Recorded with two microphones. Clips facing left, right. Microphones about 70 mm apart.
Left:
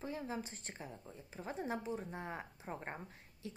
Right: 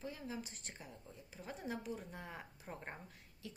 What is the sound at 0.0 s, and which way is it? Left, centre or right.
A woman's voice, left.